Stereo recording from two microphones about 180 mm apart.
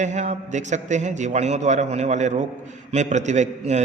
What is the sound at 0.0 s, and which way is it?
A man's voice, 40° right (ahead or behind).